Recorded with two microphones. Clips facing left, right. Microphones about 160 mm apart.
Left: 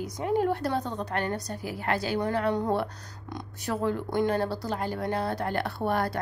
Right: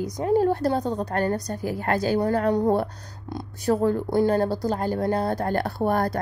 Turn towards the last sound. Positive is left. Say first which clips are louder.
# right 5 dB
turn(degrees=-40)  # may be behind; listen again after turning